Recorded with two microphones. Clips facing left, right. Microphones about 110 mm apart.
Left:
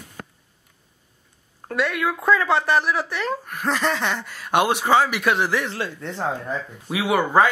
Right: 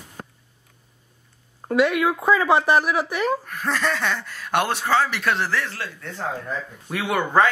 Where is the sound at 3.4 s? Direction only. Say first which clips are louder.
Left 1 dB; 15° left (ahead or behind).